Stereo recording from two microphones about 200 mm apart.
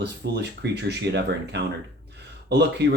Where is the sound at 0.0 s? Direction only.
55° right (ahead or behind).